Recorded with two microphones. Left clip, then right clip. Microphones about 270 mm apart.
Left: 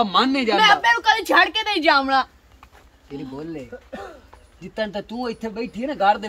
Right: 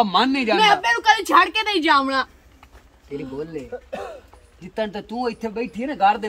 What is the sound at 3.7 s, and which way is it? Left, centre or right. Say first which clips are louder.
Speech: right 5 dB; right.